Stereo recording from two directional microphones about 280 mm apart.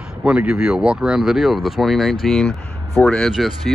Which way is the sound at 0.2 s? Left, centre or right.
Centre.